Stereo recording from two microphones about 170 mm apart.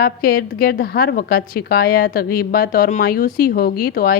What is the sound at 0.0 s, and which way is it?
A woman's voice, 65° left (ahead or behind).